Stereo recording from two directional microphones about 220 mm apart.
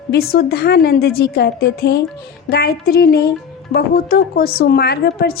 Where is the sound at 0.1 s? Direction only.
45° left (ahead or behind).